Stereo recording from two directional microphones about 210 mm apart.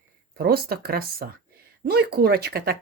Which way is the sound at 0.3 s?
45° right (ahead or behind).